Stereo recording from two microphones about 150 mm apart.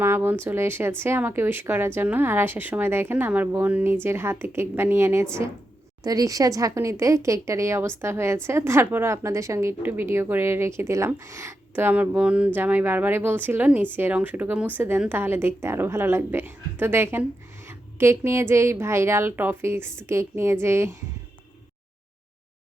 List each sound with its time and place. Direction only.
0.0 s a woman's voice: 15° right (ahead or behind)